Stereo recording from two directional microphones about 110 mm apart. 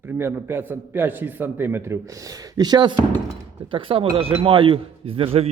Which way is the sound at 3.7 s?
55° right (ahead or behind).